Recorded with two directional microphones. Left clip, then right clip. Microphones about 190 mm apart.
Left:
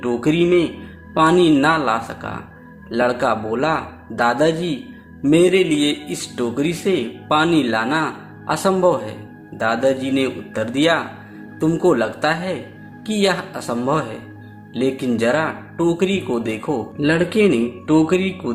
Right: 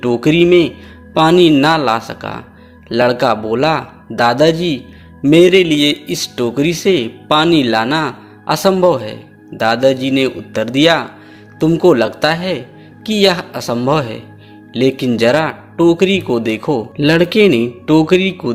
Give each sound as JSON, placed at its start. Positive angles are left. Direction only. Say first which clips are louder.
{"t": 0.0, "sound": "speech", "louder": "right 6 dB", "side_deg": -35}